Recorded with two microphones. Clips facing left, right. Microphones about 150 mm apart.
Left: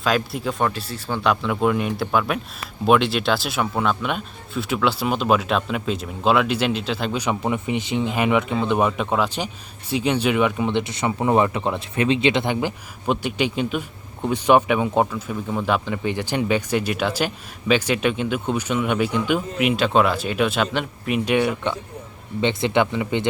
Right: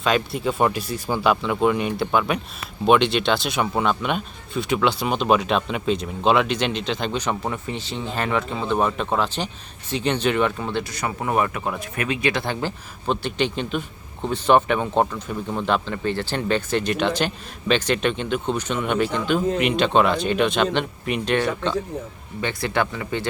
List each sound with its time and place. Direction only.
0.0 s speech: centre (ahead or behind)
0.6 s speech: 15° right (ahead or behind)
1.2 s a man's voice: centre (ahead or behind); by 23.2 s 20° left (ahead or behind)